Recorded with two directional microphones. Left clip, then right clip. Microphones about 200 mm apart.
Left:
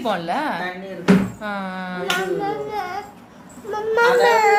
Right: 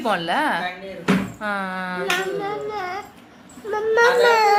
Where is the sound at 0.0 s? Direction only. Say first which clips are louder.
Right 1 dB; 15° right (ahead or behind).